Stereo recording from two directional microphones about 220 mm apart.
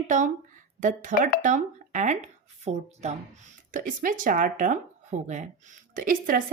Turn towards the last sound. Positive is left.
turn(degrees=-40)  # may be behind; listen again after turning